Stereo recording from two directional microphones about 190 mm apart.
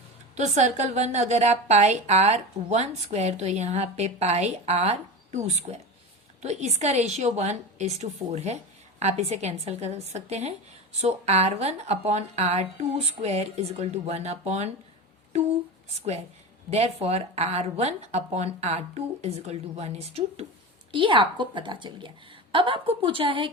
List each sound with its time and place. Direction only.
0.3 s a woman's voice: 35° right (ahead or behind)
16.6 s a woman's voice: 35° right (ahead or behind)